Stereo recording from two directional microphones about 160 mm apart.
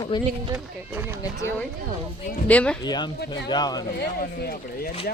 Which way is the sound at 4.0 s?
75° left (ahead or behind).